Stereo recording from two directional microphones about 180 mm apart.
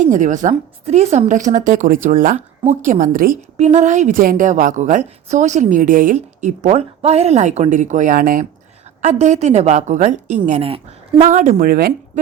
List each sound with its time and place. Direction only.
0.0 s a woman's voice: 45° right (ahead or behind)
11.2 s a woman's voice: 45° right (ahead or behind)